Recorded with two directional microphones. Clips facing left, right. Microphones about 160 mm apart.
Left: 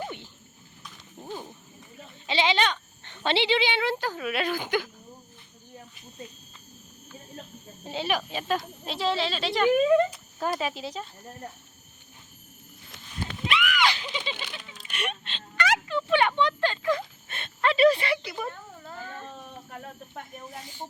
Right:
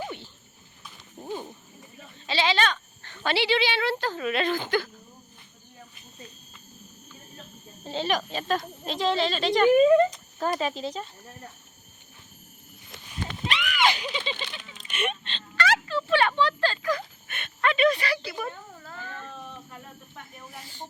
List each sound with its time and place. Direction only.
2.2 s speech: 20° left (ahead or behind)
7.9 s speech: 10° left (ahead or behind)
13.5 s horse: 30° right (ahead or behind)
14.2 s a sound: 10° left (ahead or behind)
16.4 s speech: 20° left (ahead or behind)
18.3 s speech: centre (ahead or behind)
18.9 s a sound: 20° left (ahead or behind)
20.4 s speech: 20° left (ahead or behind)